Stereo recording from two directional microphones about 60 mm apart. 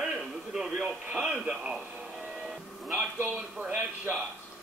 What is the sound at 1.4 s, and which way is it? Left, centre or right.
Speech, centre.